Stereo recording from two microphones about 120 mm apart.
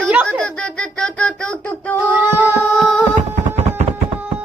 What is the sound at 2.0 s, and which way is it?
Child singing, 15° right (ahead or behind).